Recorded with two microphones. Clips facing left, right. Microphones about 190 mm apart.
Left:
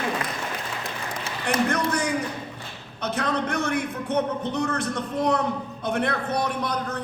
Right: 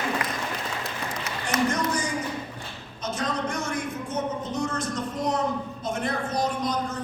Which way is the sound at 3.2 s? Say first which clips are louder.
Left 3 dB; 60° left (ahead or behind).